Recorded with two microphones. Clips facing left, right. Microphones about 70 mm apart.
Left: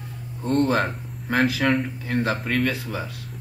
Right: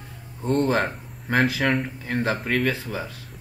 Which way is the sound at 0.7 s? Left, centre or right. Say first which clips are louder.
Even; centre.